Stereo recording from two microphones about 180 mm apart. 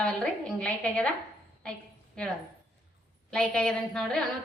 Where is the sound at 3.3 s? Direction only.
5° left (ahead or behind).